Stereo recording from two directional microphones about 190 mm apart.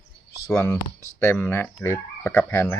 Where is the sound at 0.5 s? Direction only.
15° left (ahead or behind).